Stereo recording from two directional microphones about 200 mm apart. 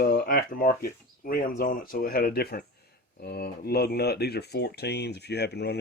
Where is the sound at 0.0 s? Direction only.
45° left (ahead or behind).